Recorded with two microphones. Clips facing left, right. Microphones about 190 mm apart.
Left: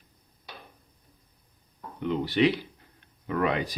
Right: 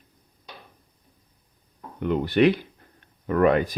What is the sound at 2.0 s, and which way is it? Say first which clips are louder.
Speech: right 4 dB; 55° right (ahead or behind).